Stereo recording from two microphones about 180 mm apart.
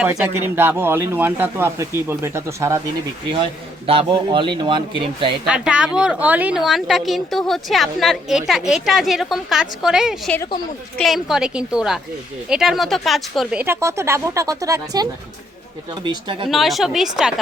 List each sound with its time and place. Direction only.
0.3 s speech: 10° right (ahead or behind)
3.8 s speech: 30° right (ahead or behind)
5.5 s speech: 5° right (ahead or behind); by 16.5 s 25° right (ahead or behind)
16.5 s speech: centre (ahead or behind)